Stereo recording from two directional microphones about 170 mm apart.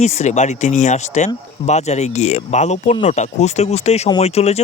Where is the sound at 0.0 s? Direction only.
40° left (ahead or behind).